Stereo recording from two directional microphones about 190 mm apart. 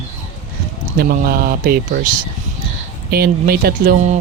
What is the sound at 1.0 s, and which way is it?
Speech, 50° right (ahead or behind).